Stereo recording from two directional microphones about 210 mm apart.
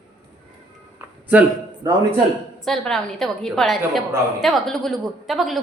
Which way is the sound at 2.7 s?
Centre (ahead or behind).